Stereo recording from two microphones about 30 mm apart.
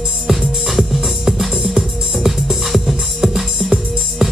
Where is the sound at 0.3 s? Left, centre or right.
Centre.